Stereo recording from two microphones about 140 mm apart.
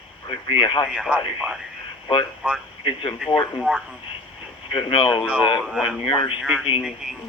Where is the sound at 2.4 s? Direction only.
10° right (ahead or behind).